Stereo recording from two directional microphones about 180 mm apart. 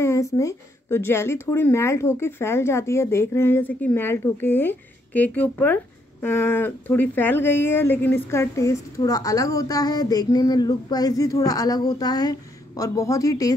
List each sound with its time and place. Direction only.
0.0 s speech: 15° left (ahead or behind)